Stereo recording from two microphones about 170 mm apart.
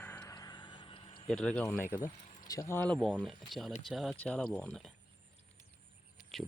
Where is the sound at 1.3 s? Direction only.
5° left (ahead or behind).